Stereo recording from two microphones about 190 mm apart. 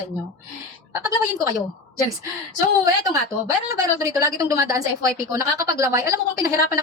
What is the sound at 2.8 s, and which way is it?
A woman's voice, 15° right (ahead or behind).